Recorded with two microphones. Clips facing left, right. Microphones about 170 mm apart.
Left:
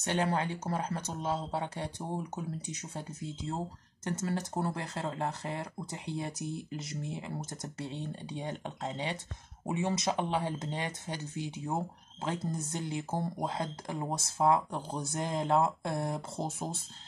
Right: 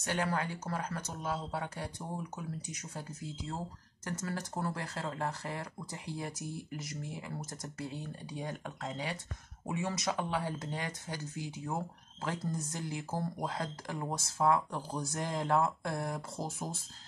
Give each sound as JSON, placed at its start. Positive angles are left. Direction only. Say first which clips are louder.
{"t": 0.0, "sound": "speech", "louder": "left 3 dB", "side_deg": 25}